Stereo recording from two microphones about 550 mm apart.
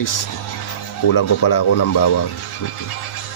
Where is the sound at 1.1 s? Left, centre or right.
Left.